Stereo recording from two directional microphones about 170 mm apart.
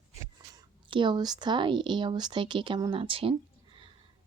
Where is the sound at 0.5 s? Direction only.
30° right (ahead or behind).